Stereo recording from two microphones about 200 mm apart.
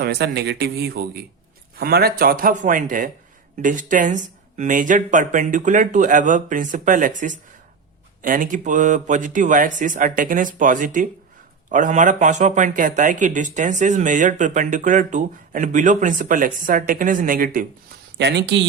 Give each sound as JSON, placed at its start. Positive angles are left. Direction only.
{"t": 0.0, "sound": "a man's voice", "side_deg": -55}
{"t": 18.2, "sound": "speech", "side_deg": -60}